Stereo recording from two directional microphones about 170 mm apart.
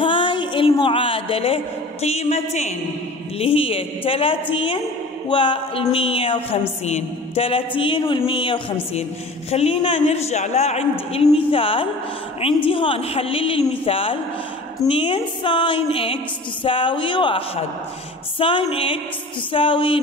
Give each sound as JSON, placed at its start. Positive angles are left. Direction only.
{"t": 0.0, "sound": "a woman's voice", "side_deg": 30}